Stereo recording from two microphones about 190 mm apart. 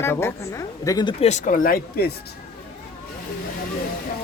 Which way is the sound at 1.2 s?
40° left (ahead or behind).